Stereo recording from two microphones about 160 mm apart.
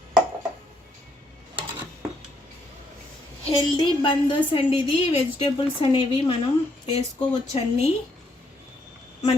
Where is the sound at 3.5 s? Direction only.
30° left (ahead or behind).